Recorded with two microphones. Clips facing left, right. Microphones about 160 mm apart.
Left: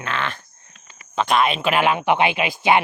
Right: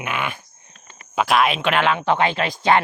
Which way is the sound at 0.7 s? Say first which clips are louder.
Right 3 dB; 45° right (ahead or behind).